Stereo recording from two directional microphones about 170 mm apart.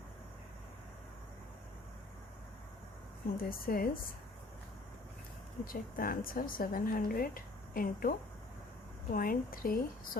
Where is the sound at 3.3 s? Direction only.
60° left (ahead or behind).